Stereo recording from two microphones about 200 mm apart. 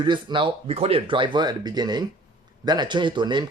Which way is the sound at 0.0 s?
25° right (ahead or behind).